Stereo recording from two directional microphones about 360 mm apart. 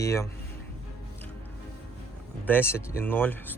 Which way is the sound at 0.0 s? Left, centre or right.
Centre.